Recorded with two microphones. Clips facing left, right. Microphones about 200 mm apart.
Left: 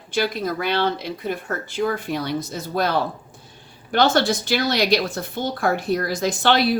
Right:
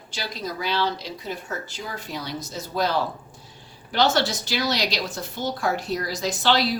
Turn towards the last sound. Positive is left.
turn(degrees=55)  # may be behind; listen again after turning